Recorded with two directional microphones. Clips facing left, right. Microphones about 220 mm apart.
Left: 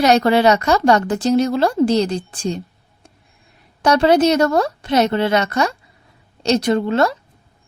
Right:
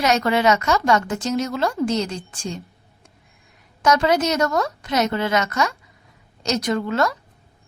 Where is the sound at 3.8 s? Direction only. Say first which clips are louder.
Left 5 dB; 30° left (ahead or behind).